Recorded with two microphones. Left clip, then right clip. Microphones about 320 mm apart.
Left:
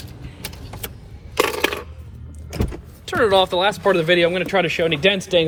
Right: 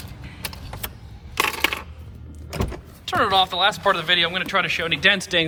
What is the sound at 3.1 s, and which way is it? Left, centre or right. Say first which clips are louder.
Speech: left 3 dB; centre.